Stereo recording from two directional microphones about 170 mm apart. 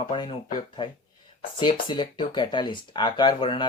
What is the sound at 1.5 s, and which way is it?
Speech, 30° left (ahead or behind).